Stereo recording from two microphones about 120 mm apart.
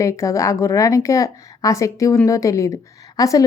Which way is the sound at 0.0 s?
25° left (ahead or behind).